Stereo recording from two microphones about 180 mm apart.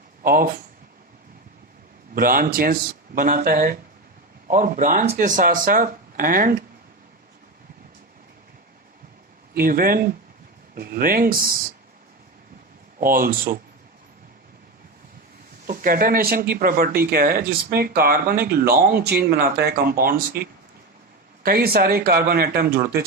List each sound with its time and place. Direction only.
0.2 s speech: 50° right (ahead or behind)
2.1 s speech: 55° right (ahead or behind)
9.6 s speech: 50° right (ahead or behind)
13.0 s speech: 50° right (ahead or behind)
15.6 s speech: 50° right (ahead or behind)
21.4 s speech: 55° right (ahead or behind)